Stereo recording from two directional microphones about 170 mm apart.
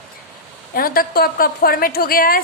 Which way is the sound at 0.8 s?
60° left (ahead or behind).